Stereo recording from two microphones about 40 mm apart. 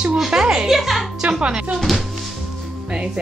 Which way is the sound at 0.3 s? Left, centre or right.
Centre.